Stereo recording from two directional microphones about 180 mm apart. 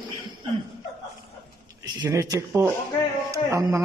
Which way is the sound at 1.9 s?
20° right (ahead or behind).